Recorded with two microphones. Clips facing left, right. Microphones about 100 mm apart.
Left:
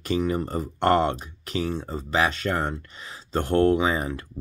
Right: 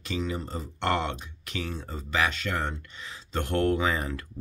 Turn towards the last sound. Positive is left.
turn(degrees=20)  # may be behind; listen again after turning